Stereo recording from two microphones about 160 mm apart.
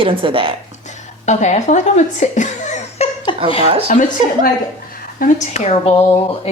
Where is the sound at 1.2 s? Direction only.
45° left (ahead or behind).